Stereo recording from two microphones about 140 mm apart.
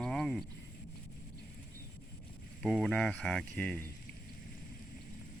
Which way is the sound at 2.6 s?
Centre (ahead or behind).